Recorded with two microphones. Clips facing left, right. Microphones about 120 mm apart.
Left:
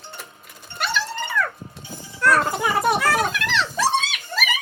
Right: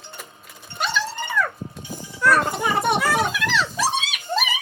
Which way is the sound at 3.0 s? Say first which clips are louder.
Even; centre (ahead or behind).